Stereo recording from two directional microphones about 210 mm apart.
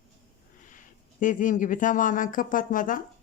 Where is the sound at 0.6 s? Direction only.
40° left (ahead or behind).